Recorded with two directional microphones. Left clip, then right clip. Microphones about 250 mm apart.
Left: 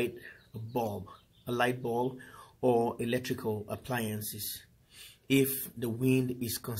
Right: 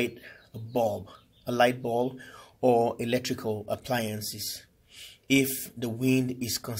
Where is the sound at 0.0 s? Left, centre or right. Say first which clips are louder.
Right 3 dB; centre.